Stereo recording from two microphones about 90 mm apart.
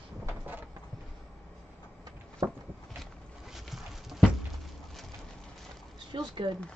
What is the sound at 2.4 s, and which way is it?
Walk, 45° right (ahead or behind).